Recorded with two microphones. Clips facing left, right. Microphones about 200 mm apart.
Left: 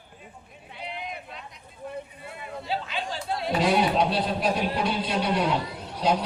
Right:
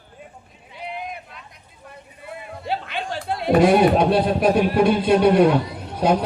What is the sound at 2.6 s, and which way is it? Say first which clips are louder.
Speech: right 4 dB; 60° right (ahead or behind).